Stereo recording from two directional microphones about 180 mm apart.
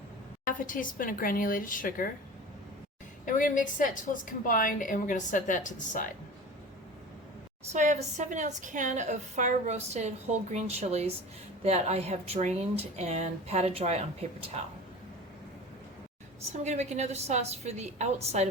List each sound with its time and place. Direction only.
0.4 s a woman's voice: 50° left (ahead or behind)
3.2 s a woman's voice: 45° left (ahead or behind)
7.7 s a woman's voice: 40° right (ahead or behind)
16.5 s a woman's voice: 40° right (ahead or behind)